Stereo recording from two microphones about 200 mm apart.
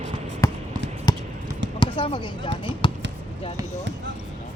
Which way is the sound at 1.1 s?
20° left (ahead or behind).